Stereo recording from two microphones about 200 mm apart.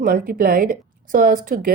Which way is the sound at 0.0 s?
45° right (ahead or behind).